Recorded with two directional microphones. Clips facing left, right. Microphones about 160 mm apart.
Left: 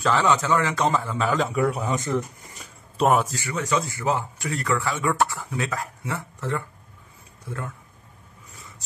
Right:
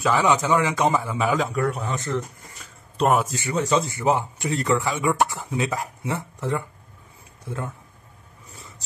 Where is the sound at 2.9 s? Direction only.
Centre (ahead or behind).